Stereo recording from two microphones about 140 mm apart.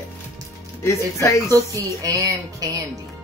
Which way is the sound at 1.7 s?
25° right (ahead or behind).